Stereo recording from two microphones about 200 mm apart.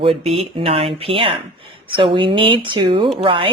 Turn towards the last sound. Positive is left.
turn(degrees=-25)  # may be behind; listen again after turning